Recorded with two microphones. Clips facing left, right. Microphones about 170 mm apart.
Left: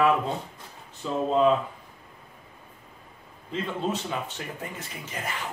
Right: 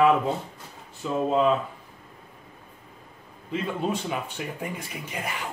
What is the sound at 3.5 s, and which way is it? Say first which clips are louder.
Speech: right 2 dB; 10° right (ahead or behind).